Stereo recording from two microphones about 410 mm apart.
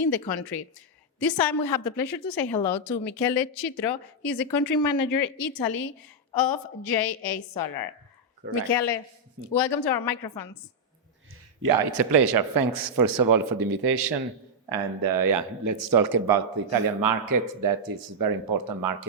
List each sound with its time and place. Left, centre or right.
0.0 s a woman's voice: left
2.6 s speech: left
3.8 s a woman's voice: left
8.6 s speech: left
9.4 s a woman's voice: left
11.6 s speech: right
14.7 s speech: right